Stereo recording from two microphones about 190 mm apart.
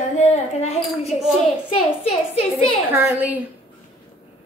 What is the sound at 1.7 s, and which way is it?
A woman's voice, 30° left (ahead or behind).